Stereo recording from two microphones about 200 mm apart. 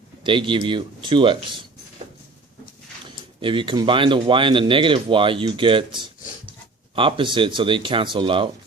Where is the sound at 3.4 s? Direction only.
25° right (ahead or behind).